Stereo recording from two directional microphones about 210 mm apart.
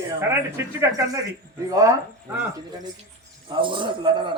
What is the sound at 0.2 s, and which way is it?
Speech, 10° right (ahead or behind).